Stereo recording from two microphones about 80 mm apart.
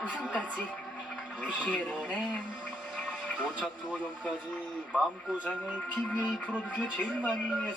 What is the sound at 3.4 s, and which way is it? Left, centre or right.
Speech, centre.